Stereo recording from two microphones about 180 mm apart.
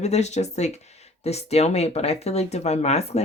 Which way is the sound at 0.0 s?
40° left (ahead or behind).